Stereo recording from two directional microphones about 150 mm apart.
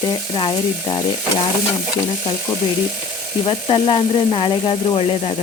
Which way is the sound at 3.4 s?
35° left (ahead or behind).